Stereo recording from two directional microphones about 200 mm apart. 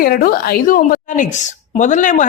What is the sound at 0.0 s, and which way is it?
A woman's voice, 45° left (ahead or behind).